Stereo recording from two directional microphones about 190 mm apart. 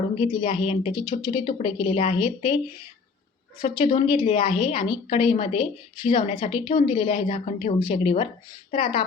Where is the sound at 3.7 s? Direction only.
25° left (ahead or behind).